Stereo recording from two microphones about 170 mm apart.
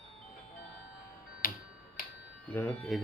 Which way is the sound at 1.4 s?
55° left (ahead or behind).